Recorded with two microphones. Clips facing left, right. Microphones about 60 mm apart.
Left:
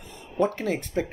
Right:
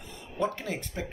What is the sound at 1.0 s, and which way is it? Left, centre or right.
Speech, left.